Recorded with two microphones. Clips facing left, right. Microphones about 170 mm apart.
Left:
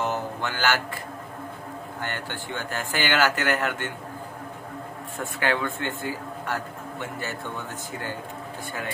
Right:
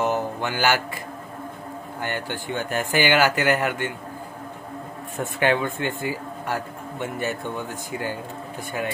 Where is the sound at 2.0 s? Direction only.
15° right (ahead or behind).